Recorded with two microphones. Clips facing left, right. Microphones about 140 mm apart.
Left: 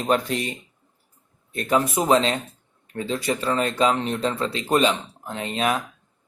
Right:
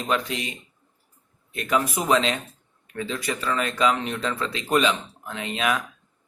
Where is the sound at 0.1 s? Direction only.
40° left (ahead or behind).